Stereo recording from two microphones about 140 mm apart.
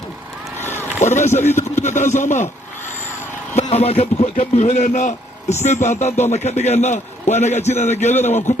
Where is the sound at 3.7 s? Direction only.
50° left (ahead or behind).